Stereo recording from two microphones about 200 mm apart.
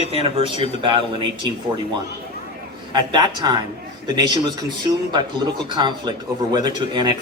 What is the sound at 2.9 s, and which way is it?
Speech, 20° right (ahead or behind).